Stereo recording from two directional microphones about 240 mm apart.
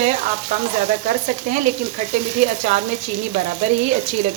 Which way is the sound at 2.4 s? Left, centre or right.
Right.